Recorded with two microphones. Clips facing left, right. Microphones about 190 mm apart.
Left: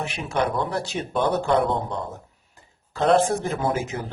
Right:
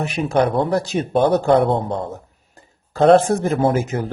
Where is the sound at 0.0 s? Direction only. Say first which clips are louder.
Right 7 dB; 40° right (ahead or behind).